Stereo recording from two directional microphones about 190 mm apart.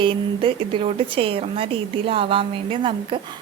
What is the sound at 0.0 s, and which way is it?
A woman's voice, 25° right (ahead or behind).